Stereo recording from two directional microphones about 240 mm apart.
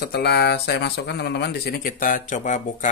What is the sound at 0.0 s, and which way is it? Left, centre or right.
Speech, left.